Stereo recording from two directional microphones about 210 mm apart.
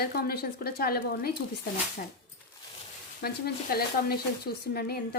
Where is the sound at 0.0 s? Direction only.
45° left (ahead or behind).